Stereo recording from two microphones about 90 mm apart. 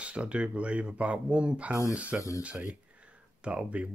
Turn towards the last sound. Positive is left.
turn(degrees=-15)  # may be behind; listen again after turning